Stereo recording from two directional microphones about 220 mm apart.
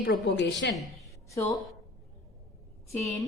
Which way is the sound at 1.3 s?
15° left (ahead or behind).